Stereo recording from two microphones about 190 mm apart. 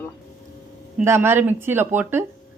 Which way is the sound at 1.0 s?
15° right (ahead or behind).